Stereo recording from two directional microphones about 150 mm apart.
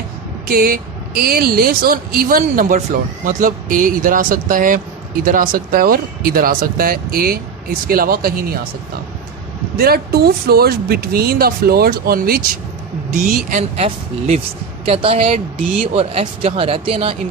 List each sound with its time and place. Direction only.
0.5 s speech: 80° right
9.8 s speech: 90° right
13.5 s speech: 50° right (ahead or behind)